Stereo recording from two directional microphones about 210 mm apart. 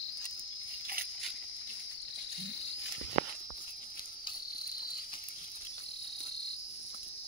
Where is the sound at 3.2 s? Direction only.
30° right (ahead or behind).